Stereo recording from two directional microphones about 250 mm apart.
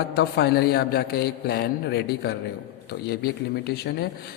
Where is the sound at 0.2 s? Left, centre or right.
Left.